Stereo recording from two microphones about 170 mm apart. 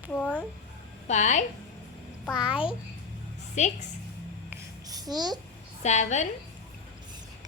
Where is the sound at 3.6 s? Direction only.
45° left (ahead or behind).